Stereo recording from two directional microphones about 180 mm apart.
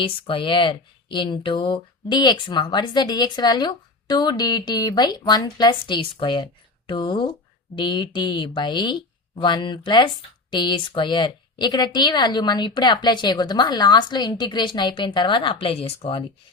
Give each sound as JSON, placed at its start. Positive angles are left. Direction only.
{"t": 0.0, "sound": "speech", "side_deg": 30}